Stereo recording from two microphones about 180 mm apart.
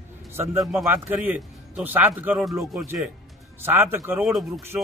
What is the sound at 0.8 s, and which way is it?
A man's voice, 10° right (ahead or behind).